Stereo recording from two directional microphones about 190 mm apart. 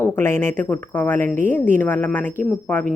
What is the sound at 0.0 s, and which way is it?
A woman's voice, 10° left (ahead or behind).